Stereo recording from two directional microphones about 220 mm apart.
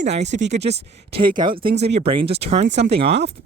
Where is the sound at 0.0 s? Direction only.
30° right (ahead or behind).